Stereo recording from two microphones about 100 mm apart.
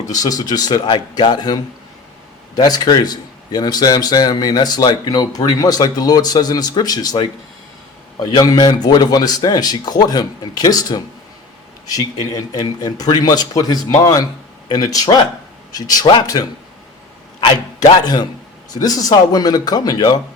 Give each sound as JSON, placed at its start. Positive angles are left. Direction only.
{"t": 0.1, "sound": "a man's voice", "side_deg": 40}
{"t": 2.6, "sound": "a man's voice", "side_deg": 40}